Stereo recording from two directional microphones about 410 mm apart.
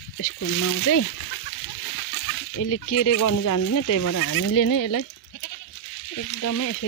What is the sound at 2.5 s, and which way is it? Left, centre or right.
Speech, left.